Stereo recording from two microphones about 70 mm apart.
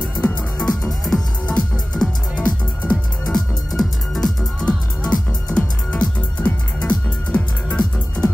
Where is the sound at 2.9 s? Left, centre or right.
Centre.